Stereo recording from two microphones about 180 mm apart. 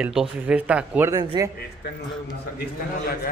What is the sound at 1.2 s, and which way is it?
Speech, 25° right (ahead or behind).